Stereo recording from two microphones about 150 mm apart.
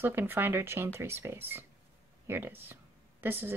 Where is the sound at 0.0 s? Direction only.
15° right (ahead or behind).